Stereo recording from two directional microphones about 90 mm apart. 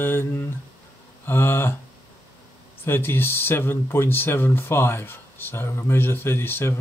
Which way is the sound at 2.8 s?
25° left (ahead or behind).